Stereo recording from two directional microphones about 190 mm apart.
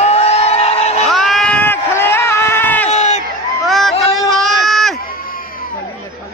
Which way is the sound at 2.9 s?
35° left (ahead or behind).